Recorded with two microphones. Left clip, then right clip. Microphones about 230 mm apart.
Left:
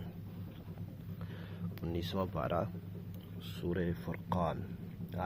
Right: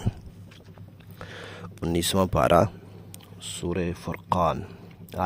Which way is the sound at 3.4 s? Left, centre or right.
Right.